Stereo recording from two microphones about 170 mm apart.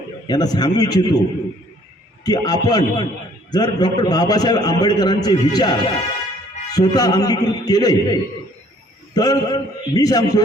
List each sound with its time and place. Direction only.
0.3 s a man's voice: 25° left (ahead or behind)
2.2 s a man's voice: 25° left (ahead or behind)